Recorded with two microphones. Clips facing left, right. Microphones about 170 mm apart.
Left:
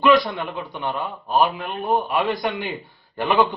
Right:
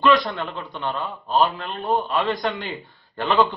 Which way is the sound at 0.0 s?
10° left (ahead or behind).